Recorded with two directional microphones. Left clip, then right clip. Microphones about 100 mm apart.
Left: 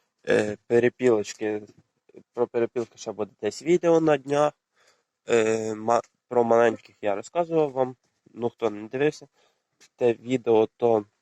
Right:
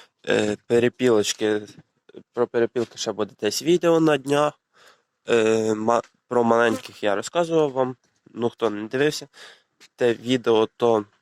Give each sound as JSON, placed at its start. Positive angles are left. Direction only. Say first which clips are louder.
{"t": 0.2, "sound": "speech", "louder": "right 1 dB", "side_deg": -35}
{"t": 6.2, "sound": "speech", "louder": "right 1 dB", "side_deg": -40}